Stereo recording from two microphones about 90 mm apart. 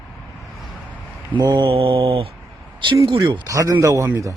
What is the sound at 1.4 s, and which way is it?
Mantra, 45° right (ahead or behind).